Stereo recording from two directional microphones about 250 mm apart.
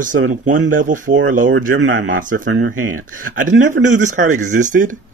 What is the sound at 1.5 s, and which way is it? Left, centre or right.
Speech, right.